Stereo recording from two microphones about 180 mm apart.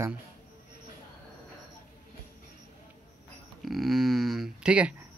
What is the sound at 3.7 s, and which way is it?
Speech, centre (ahead or behind).